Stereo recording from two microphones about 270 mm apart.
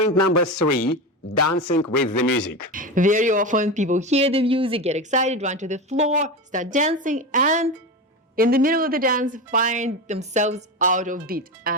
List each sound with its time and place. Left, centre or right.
0.1 s a man's voice: left
2.7 s speech: right